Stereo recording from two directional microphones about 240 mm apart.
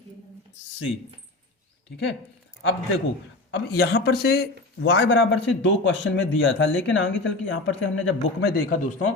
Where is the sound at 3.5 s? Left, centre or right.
Left.